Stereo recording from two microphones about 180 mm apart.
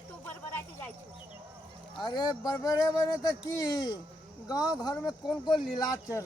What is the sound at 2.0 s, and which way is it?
Speech, 25° left (ahead or behind).